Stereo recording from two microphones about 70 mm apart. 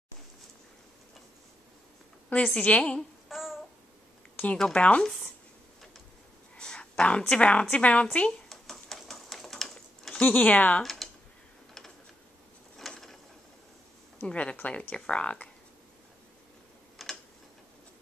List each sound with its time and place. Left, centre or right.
2.2 s speech: centre
3.3 s a sound: centre
4.6 s speech: centre
6.5 s a sound: centre
7.7 s speech: centre
8.5 s typewriter: centre
10.2 s speech: centre
10.8 s computer keyboard: centre
12.7 s mechanisms: centre
14.2 s speech: centre
17.0 s tick-tock: centre